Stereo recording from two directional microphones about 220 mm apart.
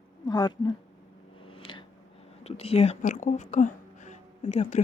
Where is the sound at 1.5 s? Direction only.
25° left (ahead or behind).